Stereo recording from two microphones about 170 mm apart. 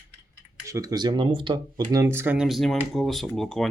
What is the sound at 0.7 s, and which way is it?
Speech, 20° right (ahead or behind).